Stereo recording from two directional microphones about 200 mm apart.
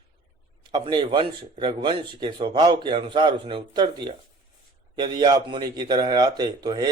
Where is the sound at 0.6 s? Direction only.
20° right (ahead or behind).